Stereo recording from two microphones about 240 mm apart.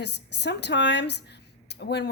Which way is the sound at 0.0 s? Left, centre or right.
Left.